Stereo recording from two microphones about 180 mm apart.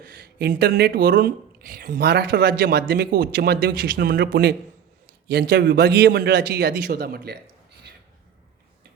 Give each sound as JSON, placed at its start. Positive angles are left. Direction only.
{"t": 0.0, "sound": "speech", "side_deg": -60}